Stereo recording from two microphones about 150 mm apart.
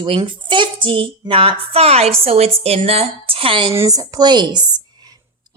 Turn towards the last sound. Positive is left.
turn(degrees=-25)  # may be behind; listen again after turning